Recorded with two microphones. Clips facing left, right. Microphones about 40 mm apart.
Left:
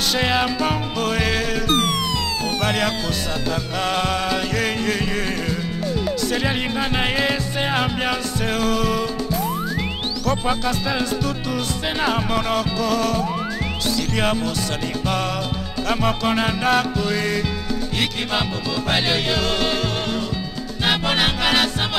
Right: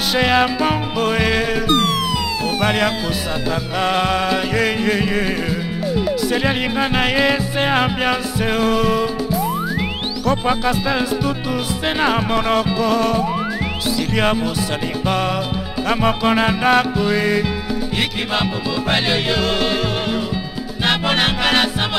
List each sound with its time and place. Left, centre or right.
0.1 s music: centre
15.9 s music: centre
18.9 s music: centre